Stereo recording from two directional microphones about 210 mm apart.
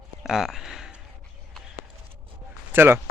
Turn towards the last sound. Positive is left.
turn(degrees=-10)  # may be behind; listen again after turning